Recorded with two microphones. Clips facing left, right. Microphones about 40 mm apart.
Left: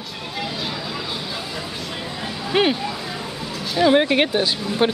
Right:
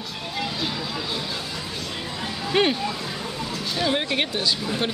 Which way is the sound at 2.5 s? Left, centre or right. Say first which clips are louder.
Left 2 dB; centre.